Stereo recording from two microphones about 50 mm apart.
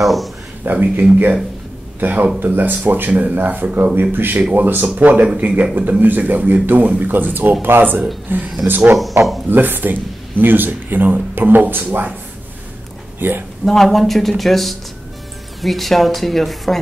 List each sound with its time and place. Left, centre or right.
0.0 s speech: centre
0.7 s speech: right
3.9 s speech: right
5.2 s a man's voice: right
5.8 s speech: right
9.1 s speech: right
13.2 s speech: right
13.7 s speech: centre